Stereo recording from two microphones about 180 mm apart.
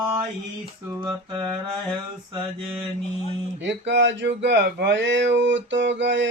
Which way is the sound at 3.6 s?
80° right.